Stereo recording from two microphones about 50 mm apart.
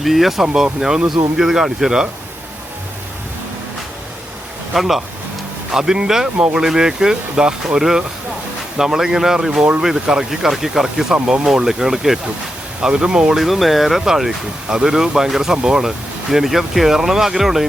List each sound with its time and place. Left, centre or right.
0.0 s speech: centre
4.7 s speech: centre
12.8 s speech: centre
13.3 s speech: centre